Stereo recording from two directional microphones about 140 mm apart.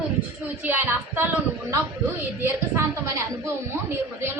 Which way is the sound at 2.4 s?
20° right (ahead or behind).